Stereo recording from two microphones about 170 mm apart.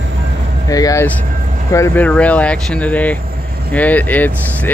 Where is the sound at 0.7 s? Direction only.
20° left (ahead or behind).